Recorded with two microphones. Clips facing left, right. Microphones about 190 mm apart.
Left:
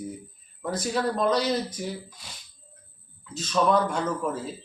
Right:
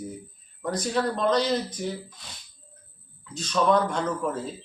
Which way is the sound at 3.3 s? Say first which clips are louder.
Even; 5° left (ahead or behind).